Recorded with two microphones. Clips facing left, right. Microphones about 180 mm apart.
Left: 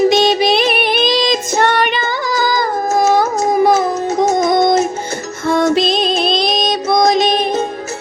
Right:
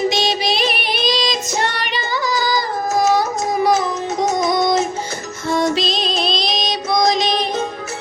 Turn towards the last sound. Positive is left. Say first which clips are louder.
# left 5 dB
turn(degrees=55)  # may be behind; listen again after turning